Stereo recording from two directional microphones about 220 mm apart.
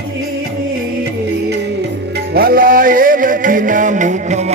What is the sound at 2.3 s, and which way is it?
Music, 45° right (ahead or behind).